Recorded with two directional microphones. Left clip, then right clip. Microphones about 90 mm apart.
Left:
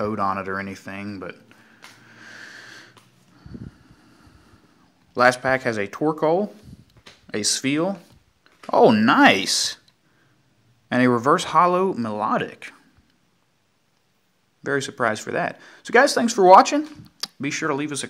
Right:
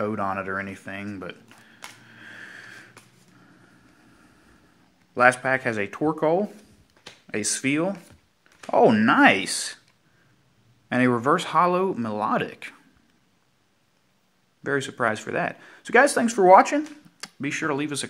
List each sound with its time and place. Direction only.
0.0 s speech: 20° left (ahead or behind)
2.0 s wheeze: 30° left (ahead or behind)
5.1 s speech: 25° left (ahead or behind)
10.9 s speech: 15° left (ahead or behind)
14.6 s speech: 10° left (ahead or behind)